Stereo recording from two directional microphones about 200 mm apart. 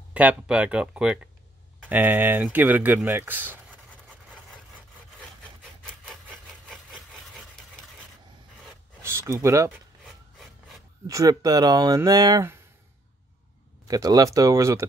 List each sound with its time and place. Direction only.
0.1 s speech: 5° right (ahead or behind)
6.7 s wood: 5° right (ahead or behind)
8.6 s a sound: 15° right (ahead or behind)
10.0 s rub: centre (ahead or behind)
11.1 s speech: 15° right (ahead or behind)
13.8 s speech: 15° right (ahead or behind)